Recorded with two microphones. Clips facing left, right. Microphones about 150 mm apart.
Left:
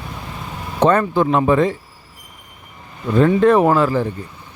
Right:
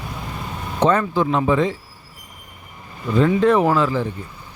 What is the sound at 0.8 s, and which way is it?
Speech, 55° left (ahead or behind).